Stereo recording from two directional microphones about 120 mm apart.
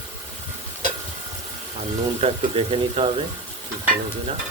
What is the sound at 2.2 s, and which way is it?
Speech, 55° right (ahead or behind).